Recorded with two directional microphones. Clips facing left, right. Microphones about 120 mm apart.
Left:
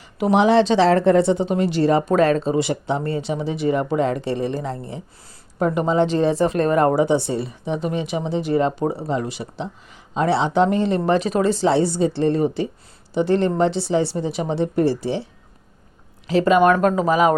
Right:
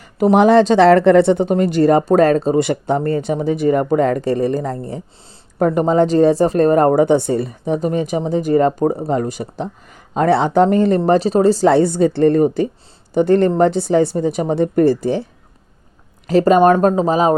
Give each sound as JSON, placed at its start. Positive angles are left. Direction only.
{"t": 0.0, "sound": "a woman's voice", "side_deg": -50}
{"t": 16.7, "sound": "speech", "side_deg": -25}